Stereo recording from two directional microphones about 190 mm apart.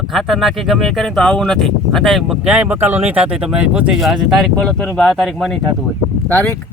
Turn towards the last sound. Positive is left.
turn(degrees=10)  # may be behind; listen again after turning